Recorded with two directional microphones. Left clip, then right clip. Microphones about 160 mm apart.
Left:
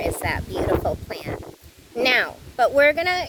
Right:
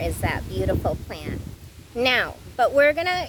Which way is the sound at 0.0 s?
25° left (ahead or behind).